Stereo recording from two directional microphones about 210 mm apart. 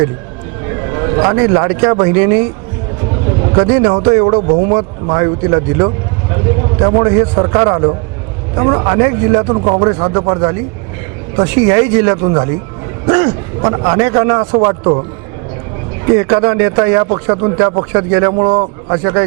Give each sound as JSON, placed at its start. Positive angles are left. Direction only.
{"t": 0.9, "sound": "a man's voice", "side_deg": -25}
{"t": 3.5, "sound": "a man's voice", "side_deg": -25}
{"t": 16.1, "sound": "speech", "side_deg": -20}